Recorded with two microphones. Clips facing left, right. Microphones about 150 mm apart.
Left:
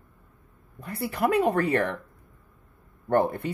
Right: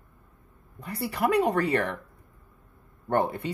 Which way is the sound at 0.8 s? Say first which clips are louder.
Left 1 dB; 50° left (ahead or behind).